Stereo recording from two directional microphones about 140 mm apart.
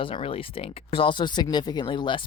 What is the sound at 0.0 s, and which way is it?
Speech, 40° left (ahead or behind).